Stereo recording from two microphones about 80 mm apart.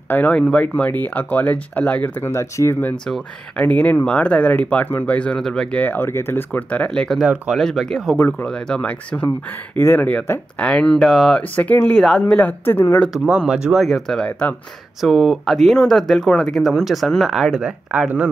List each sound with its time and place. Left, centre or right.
0.1 s speech: centre
2.3 s speech: left
3.5 s speech: centre
8.2 s speech: left
8.5 s speech: centre
9.8 s speech: left; by 11.4 s centre
11.5 s speech: centre
13.1 s speech: centre